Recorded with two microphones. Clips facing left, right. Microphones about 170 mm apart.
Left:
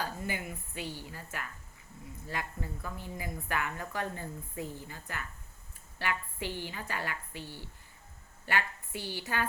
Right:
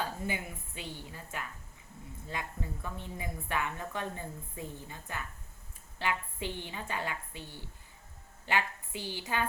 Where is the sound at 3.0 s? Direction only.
25° right (ahead or behind).